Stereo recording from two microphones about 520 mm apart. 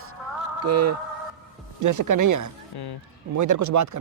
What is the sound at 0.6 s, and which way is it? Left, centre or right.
Speech, right.